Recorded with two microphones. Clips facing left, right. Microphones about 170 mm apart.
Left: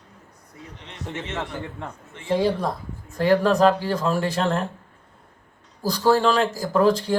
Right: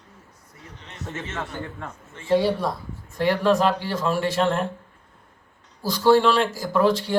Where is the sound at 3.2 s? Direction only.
40° left (ahead or behind).